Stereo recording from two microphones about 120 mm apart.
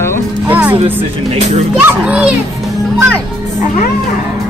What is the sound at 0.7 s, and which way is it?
Speech, 50° right (ahead or behind).